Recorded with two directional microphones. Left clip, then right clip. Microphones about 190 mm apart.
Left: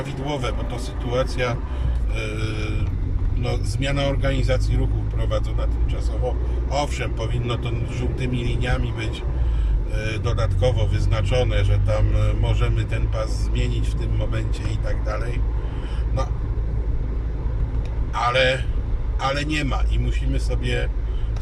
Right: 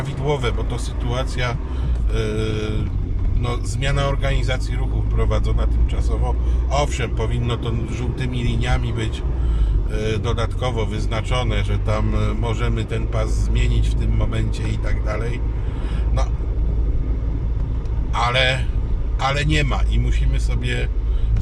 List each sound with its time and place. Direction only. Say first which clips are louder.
1.1 s speech: left 2 dB; 15° right (ahead or behind)
6.7 s speech: right 3 dB; 15° right (ahead or behind)
15.0 s speech: right 3 dB; 15° right (ahead or behind)
18.1 s speech: even; 15° right (ahead or behind)